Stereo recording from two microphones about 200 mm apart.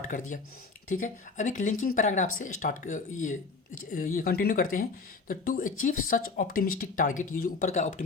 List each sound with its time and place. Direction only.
0.1 s speech: 40° left (ahead or behind)